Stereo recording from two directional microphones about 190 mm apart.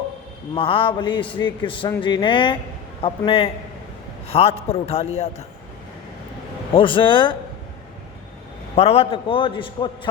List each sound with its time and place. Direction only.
0.5 s a man's voice: 30° left (ahead or behind)
6.7 s a man's voice: 25° left (ahead or behind)
8.7 s a man's voice: 30° left (ahead or behind)